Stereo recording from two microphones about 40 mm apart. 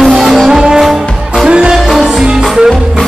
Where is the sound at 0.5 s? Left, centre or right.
Centre.